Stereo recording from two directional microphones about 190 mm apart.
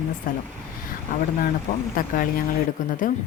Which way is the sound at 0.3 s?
50° left (ahead or behind).